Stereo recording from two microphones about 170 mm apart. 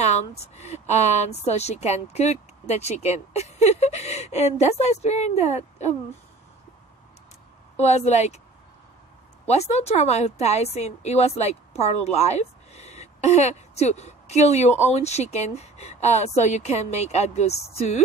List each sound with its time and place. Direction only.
0.0 s a woman's voice: 40° left (ahead or behind)
7.7 s a woman's voice: 40° left (ahead or behind)
9.5 s a woman's voice: 40° left (ahead or behind)